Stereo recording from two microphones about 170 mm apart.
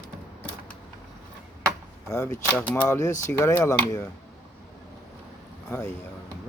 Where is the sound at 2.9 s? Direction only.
20° left (ahead or behind).